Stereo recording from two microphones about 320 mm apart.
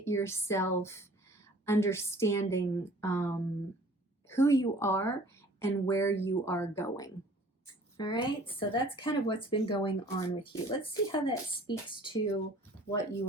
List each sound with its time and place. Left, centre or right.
0.0 s a woman's voice: centre